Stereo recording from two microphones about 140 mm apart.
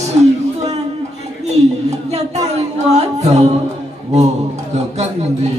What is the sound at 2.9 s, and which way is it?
Music, 50° right (ahead or behind).